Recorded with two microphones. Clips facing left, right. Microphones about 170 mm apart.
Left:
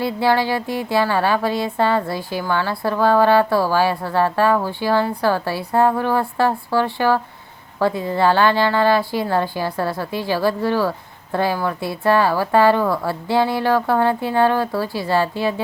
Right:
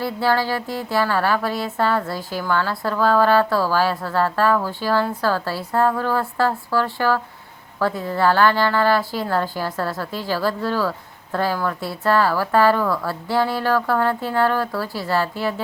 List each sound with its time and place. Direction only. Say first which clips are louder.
0.0 s a woman's voice: left 2 dB; 15° left (ahead or behind)